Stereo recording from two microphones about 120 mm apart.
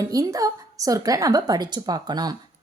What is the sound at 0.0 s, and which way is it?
A woman's voice, 30° right (ahead or behind).